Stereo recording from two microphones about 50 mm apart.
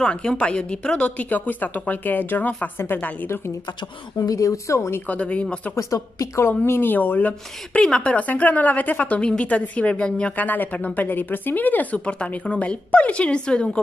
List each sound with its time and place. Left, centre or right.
0.0 s a woman's voice: centre; by 3.3 s left
4.2 s speech: left
5.0 s a woman's voice: left
5.8 s a woman's voice: left
6.9 s a woman's voice: left
10.3 s a woman's voice: left
12.0 s a woman's voice: left